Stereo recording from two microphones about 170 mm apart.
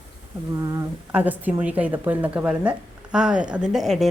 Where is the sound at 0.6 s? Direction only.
20° right (ahead or behind).